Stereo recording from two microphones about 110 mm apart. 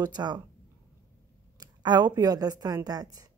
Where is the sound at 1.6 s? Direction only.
40° right (ahead or behind).